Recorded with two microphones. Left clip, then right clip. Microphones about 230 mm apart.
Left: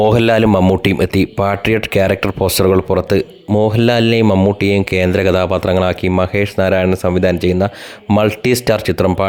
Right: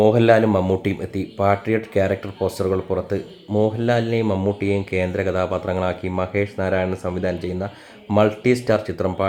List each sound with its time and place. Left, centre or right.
0.0 s speech: left